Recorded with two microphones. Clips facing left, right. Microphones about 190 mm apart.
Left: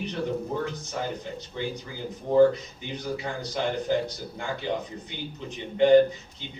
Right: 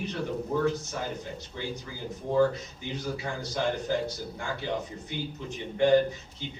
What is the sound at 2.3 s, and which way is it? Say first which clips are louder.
A man's voice: left 6 dB; 20° left (ahead or behind).